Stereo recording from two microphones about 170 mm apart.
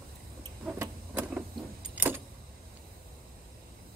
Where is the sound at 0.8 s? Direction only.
10° right (ahead or behind).